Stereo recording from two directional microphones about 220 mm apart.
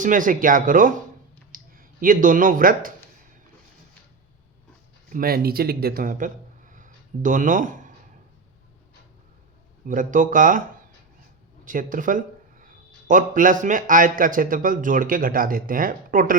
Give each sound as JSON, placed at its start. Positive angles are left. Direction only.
{"t": 0.0, "sound": "speech", "side_deg": -35}
{"t": 5.0, "sound": "speech", "side_deg": -40}
{"t": 9.8, "sound": "speech", "side_deg": -35}
{"t": 11.6, "sound": "speech", "side_deg": -35}